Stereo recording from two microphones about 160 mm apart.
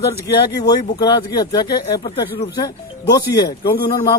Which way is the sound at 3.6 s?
65° left (ahead or behind).